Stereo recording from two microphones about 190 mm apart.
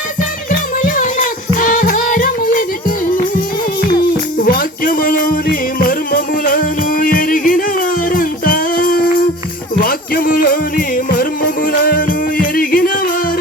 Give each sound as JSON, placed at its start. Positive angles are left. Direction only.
{"t": 0.8, "sound": "music", "side_deg": 45}
{"t": 4.4, "sound": "music", "side_deg": 50}